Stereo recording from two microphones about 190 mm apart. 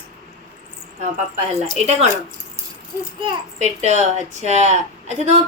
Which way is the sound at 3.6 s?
35° right (ahead or behind).